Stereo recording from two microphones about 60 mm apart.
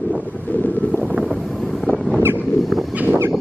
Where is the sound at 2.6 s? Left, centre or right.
Centre.